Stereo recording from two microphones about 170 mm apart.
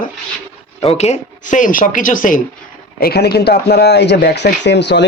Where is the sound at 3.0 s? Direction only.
70° left (ahead or behind); by 5.0 s 90° left.